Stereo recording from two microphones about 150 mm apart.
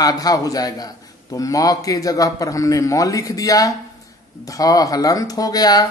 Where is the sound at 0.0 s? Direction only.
25° left (ahead or behind).